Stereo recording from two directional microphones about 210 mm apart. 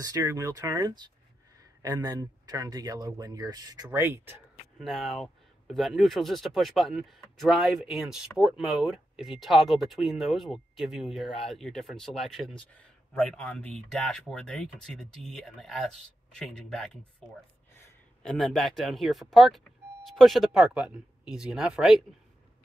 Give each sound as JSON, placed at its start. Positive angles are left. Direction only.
{"t": 0.0, "sound": "speech", "side_deg": -15}
{"t": 4.7, "sound": "speech", "side_deg": 0}
{"t": 18.2, "sound": "speech", "side_deg": 0}